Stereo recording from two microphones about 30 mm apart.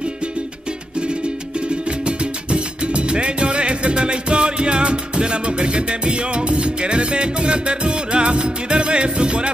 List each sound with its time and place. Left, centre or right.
1.9 s music: right